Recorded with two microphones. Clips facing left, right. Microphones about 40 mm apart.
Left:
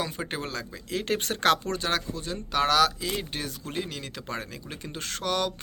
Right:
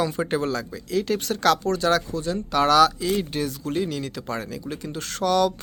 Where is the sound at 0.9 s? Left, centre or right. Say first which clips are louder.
Right 4 dB; left.